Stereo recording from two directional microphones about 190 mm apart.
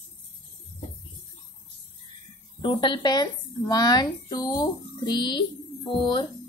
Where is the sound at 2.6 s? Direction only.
25° left (ahead or behind).